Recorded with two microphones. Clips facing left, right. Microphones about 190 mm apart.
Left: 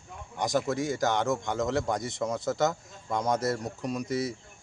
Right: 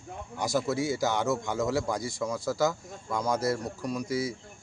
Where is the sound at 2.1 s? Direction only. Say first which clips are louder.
Left 1 dB; 20° left (ahead or behind).